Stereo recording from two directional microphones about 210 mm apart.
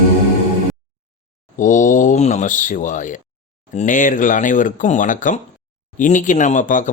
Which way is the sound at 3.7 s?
35° left (ahead or behind).